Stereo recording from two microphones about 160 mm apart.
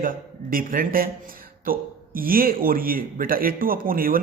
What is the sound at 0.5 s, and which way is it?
Speech, 60° right (ahead or behind).